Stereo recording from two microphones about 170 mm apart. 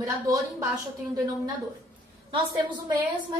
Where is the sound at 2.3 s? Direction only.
25° right (ahead or behind).